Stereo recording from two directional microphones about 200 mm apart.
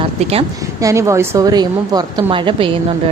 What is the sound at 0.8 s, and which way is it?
A woman's voice, 15° right (ahead or behind).